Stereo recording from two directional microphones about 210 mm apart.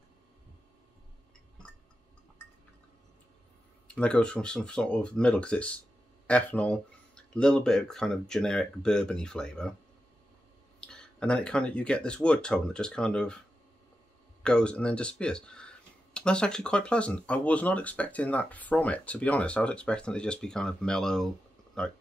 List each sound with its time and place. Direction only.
3.8 s speech: 5° left (ahead or behind)
10.8 s speech: 5° left (ahead or behind)
14.4 s speech: 5° left (ahead or behind)